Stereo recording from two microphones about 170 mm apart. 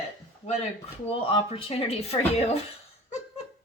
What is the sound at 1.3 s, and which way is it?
Speech, 35° left (ahead or behind).